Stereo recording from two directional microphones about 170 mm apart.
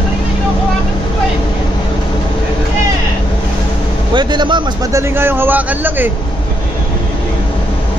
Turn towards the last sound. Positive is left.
turn(degrees=-10)  # may be behind; listen again after turning